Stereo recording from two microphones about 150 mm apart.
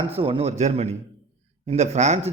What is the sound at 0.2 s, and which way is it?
A man's voice, 40° right (ahead or behind).